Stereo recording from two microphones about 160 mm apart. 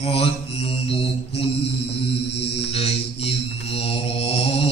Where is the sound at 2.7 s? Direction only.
40° left (ahead or behind).